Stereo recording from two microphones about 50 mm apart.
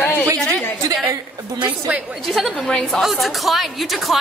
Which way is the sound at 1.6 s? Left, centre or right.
Right.